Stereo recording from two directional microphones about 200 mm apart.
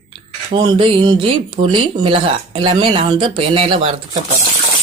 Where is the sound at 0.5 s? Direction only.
25° right (ahead or behind).